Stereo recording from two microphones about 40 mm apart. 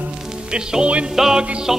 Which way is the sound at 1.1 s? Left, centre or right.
Centre.